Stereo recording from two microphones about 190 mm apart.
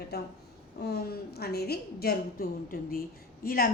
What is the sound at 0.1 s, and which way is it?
A woman's voice, 60° left (ahead or behind).